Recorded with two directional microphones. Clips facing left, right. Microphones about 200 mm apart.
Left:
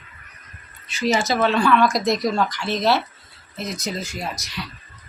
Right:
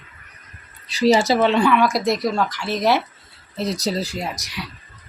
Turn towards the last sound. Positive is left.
turn(degrees=-15)  # may be behind; listen again after turning